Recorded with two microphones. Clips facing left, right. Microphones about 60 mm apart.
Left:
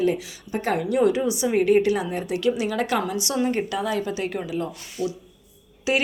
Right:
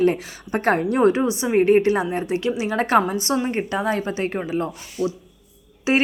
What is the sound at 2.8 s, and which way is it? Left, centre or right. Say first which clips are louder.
Speech: right 6 dB; right.